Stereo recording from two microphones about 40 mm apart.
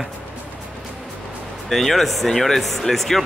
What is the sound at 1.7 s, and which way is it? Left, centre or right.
Speech, centre.